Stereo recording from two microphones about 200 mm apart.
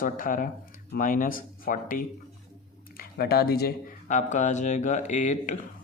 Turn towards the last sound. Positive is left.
turn(degrees=35)  # may be behind; listen again after turning